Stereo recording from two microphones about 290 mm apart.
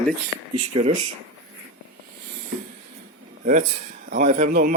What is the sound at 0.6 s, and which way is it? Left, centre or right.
Speech, right.